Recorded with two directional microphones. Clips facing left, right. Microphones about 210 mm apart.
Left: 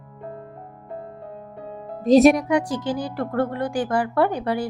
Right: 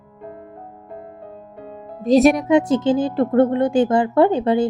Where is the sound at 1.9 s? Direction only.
Centre (ahead or behind).